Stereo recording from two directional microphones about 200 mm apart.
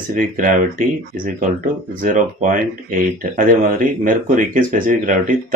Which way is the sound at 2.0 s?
40° right (ahead or behind).